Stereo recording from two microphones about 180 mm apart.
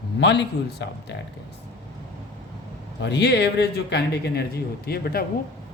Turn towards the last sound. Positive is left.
turn(degrees=60)  # may be behind; listen again after turning